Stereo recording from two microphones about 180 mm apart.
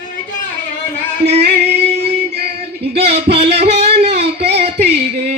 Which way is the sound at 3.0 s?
35° right (ahead or behind).